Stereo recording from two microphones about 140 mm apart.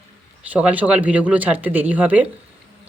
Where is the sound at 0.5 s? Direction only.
10° right (ahead or behind).